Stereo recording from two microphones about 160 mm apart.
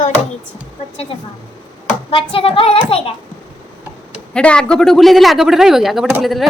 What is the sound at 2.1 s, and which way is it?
Speech, 35° left (ahead or behind).